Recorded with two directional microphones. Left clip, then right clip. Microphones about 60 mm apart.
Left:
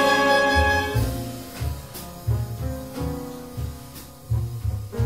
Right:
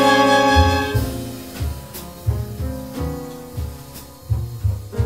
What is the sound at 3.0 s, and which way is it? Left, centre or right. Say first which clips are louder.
Music: right 2 dB; right.